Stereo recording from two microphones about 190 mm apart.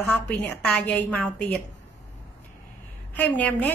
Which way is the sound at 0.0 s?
5° left (ahead or behind).